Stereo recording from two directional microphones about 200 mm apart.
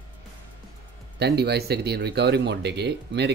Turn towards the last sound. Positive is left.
turn(degrees=-55)  # may be behind; listen again after turning